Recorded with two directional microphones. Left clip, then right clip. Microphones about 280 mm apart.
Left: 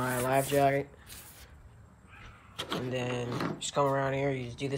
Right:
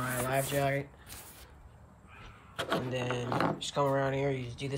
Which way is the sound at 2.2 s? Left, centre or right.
Centre.